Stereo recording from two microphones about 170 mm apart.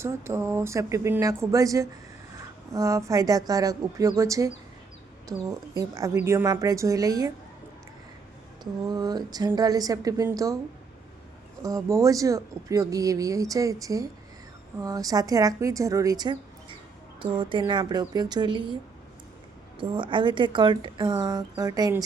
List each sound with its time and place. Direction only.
0.0 s speech: 15° right (ahead or behind)
8.9 s speech: 25° right (ahead or behind)
11.6 s speech: 20° right (ahead or behind)
19.8 s speech: 30° right (ahead or behind)